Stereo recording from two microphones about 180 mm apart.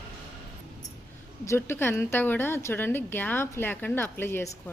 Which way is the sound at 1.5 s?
15° left (ahead or behind).